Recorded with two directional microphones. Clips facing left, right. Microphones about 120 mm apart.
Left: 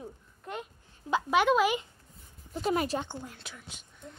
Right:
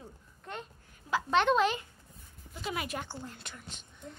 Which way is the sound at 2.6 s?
35° left (ahead or behind).